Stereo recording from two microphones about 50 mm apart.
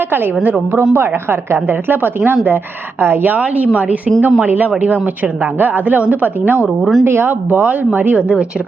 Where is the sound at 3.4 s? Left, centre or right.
Right.